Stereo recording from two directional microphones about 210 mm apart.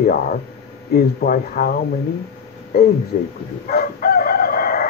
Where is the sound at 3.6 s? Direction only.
45° left (ahead or behind).